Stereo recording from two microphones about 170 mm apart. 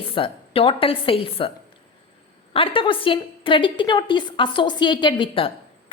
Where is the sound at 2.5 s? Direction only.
30° left (ahead or behind).